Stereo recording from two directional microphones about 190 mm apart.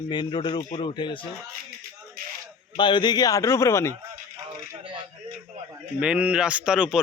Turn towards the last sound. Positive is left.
turn(degrees=-5)  # may be behind; listen again after turning